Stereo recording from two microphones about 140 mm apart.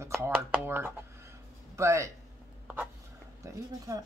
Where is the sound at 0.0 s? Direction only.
15° right (ahead or behind).